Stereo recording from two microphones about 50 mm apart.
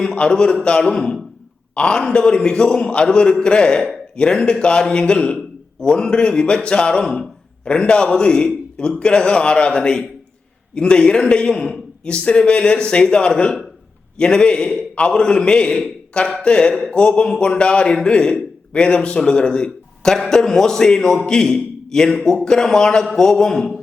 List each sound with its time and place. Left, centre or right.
0.0 s a man's voice: centre
7.0 s a man's voice: centre
7.6 s a man's voice: centre